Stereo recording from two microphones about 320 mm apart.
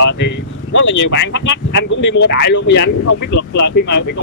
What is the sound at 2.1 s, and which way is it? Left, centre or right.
Speech, left.